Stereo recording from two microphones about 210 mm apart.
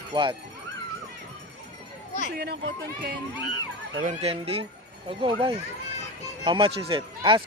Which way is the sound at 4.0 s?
35° right (ahead or behind).